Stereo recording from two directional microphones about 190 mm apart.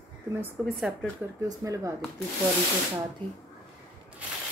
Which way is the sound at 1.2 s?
15° right (ahead or behind).